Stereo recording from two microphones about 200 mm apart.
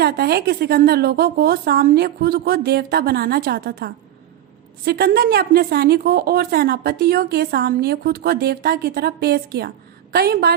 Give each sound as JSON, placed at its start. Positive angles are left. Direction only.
{"t": 0.0, "sound": "a woman's voice", "side_deg": -50}